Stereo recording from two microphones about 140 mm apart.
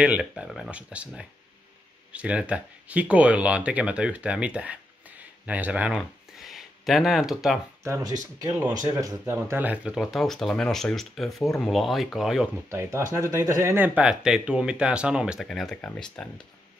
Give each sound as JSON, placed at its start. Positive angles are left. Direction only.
{"t": 0.0, "sound": "speech", "side_deg": -10}
{"t": 7.8, "sound": "speech", "side_deg": -25}
{"t": 12.6, "sound": "speech", "side_deg": -20}